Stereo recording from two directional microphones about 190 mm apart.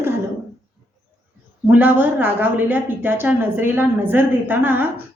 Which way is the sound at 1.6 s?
10° right (ahead or behind).